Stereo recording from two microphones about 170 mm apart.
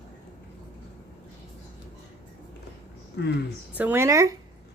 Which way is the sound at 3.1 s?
85° left.